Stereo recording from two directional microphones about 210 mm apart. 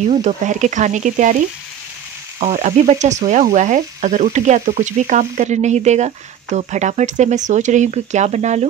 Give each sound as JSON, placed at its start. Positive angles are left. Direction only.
{"t": 0.1, "sound": "frying", "side_deg": -35}
{"t": 2.4, "sound": "frying", "side_deg": -35}